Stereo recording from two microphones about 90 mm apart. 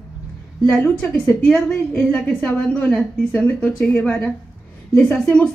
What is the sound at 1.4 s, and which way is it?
A woman's voice, centre (ahead or behind).